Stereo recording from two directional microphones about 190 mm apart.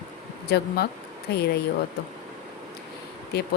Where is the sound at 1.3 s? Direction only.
60° left (ahead or behind).